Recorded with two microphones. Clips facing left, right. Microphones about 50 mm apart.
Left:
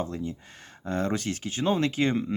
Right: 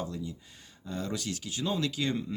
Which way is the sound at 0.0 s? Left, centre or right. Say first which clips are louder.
Left 5 dB; left.